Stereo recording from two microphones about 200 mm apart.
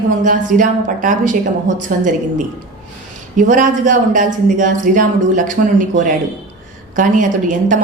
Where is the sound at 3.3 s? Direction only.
40° right (ahead or behind).